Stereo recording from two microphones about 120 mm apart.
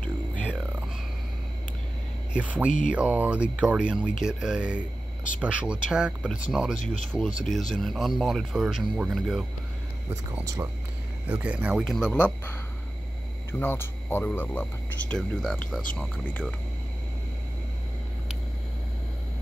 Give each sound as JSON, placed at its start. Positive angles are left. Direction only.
{"t": 0.0, "sound": "a sound", "side_deg": 10}
{"t": 0.5, "sound": "music", "side_deg": -10}
{"t": 2.3, "sound": "speech", "side_deg": -10}
{"t": 10.4, "sound": "speech", "side_deg": -25}
{"t": 11.2, "sound": "speech", "side_deg": -10}
{"t": 13.5, "sound": "speech", "side_deg": 20}